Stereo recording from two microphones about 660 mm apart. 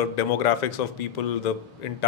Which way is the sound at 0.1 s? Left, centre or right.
Left.